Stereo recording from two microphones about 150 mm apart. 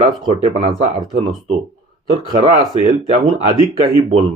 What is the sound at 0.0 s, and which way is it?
Speech, 30° right (ahead or behind).